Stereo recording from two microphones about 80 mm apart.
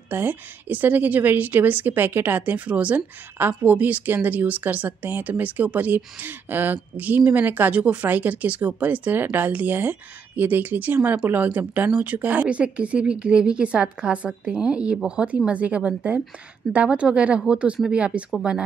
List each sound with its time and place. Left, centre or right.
0.1 s speech: right